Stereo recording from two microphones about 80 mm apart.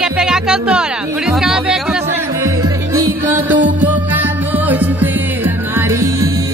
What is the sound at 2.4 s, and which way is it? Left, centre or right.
Music, right.